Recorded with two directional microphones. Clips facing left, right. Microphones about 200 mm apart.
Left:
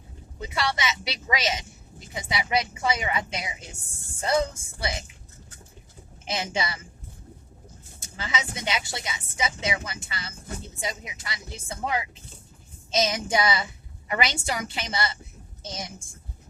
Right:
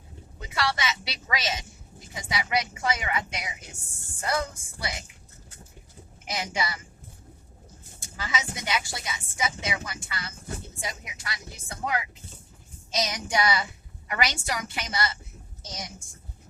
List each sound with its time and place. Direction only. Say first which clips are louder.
0.3 s speech: left 1 dB; 20° left (ahead or behind)
6.2 s speech: left 2 dB; 25° left (ahead or behind)
7.9 s speech: left 1 dB; 25° left (ahead or behind)